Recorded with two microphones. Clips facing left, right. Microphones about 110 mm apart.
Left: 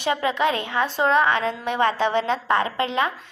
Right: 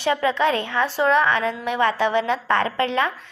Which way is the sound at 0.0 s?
20° left (ahead or behind).